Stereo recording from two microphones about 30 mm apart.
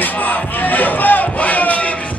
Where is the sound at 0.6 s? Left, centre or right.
Left.